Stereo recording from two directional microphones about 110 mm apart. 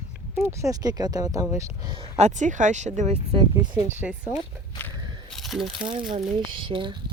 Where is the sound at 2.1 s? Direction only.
90° right.